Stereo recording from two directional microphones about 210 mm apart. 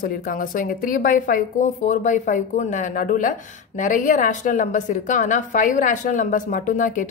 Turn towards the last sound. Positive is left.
turn(degrees=40)  # may be behind; listen again after turning